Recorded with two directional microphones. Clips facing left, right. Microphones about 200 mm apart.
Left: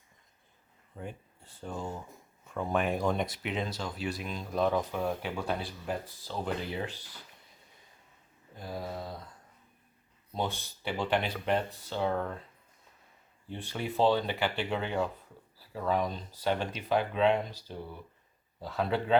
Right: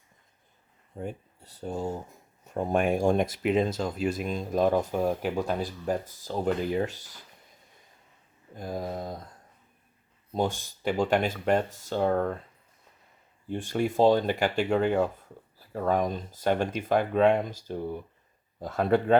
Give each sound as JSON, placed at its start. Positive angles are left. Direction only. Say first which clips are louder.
{"t": 0.9, "sound": "speech", "louder": "right 6 dB", "side_deg": -40}
{"t": 1.7, "sound": "speech", "louder": "right 6 dB", "side_deg": -25}
{"t": 2.4, "sound": "speech", "louder": "right 5 dB", "side_deg": -40}
{"t": 8.5, "sound": "speech", "louder": "right 5 dB", "side_deg": -45}
{"t": 10.3, "sound": "speech", "louder": "right 6 dB", "side_deg": -45}
{"t": 13.5, "sound": "speech", "louder": "right 8 dB", "side_deg": -45}